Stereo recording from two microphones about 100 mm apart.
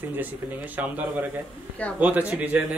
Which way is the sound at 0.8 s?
15° right (ahead or behind).